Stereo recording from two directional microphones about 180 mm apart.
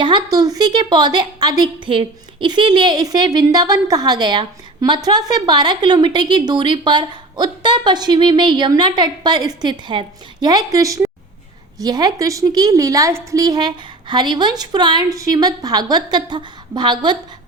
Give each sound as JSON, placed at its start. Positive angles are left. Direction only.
{"t": 0.0, "sound": "a woman's voice", "side_deg": -25}